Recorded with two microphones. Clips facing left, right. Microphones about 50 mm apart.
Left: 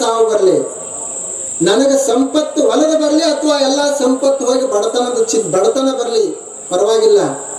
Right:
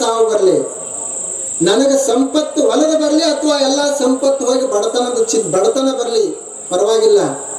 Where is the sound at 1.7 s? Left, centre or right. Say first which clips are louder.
Left 1 dB; centre.